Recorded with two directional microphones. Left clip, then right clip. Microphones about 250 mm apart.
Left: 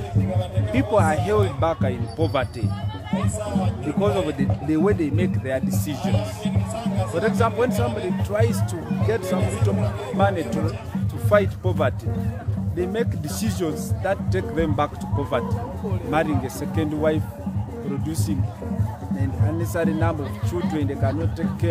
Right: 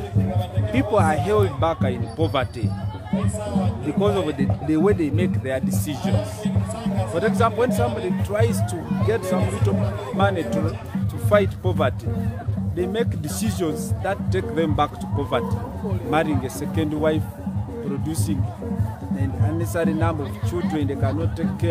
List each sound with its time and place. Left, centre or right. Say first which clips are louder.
0.7 s speech: even; centre
3.1 s speech: even; left
4.3 s speech: right 1 dB; centre
6.1 s music: right 1 dB; left
7.2 s speech: right 1 dB; centre
19.1 s speech: right 1 dB; centre